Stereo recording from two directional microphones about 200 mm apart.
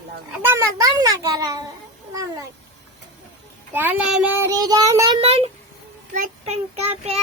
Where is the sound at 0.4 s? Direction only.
15° right (ahead or behind).